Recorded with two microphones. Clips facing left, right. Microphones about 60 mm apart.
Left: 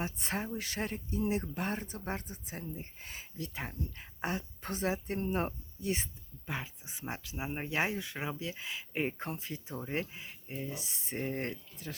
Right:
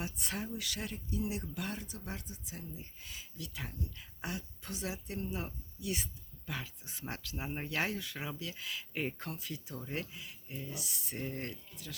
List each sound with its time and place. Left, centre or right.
0.0 s speech: left